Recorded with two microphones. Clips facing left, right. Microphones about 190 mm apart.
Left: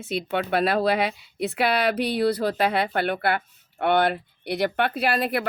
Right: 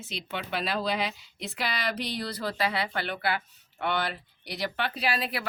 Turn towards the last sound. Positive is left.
turn(degrees=50)  # may be behind; listen again after turning